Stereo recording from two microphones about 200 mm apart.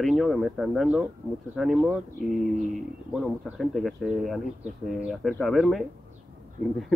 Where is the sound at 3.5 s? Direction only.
Centre (ahead or behind).